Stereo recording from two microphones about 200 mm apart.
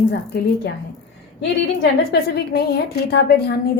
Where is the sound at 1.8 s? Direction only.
55° left (ahead or behind).